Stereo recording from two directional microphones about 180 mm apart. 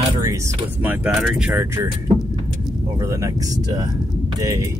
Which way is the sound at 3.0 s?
20° right (ahead or behind).